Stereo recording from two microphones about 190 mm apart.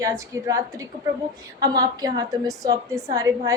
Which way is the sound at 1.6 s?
20° right (ahead or behind).